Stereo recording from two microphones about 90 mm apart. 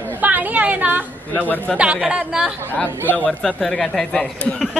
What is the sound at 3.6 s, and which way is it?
Speech, 5° left (ahead or behind).